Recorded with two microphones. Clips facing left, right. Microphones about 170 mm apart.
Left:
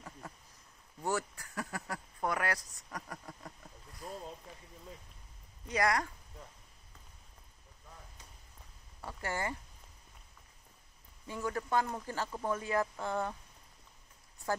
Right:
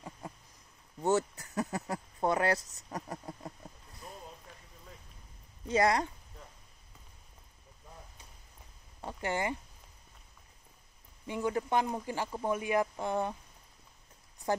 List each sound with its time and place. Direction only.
0.2 s a sound: 15° right (ahead or behind)
5.7 s speech: 25° right (ahead or behind)
9.0 s speech: 20° right (ahead or behind)
11.2 s speech: 20° right (ahead or behind)